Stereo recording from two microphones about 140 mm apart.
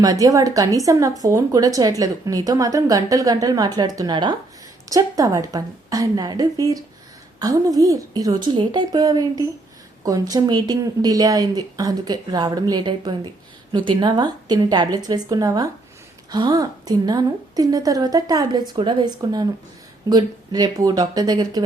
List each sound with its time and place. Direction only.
0.0 s speech: 25° right (ahead or behind)